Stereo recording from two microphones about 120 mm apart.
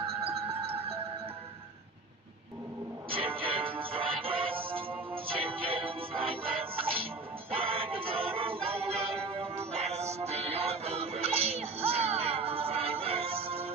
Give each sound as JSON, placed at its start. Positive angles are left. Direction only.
{"t": 0.0, "sound": "music", "side_deg": -50}
{"t": 3.1, "sound": "music", "side_deg": -50}